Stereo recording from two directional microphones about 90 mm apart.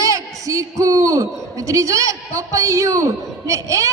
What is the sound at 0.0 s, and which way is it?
A man's voice, 40° right (ahead or behind).